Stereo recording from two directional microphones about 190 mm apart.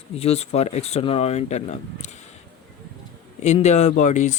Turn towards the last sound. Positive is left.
turn(degrees=40)  # may be behind; listen again after turning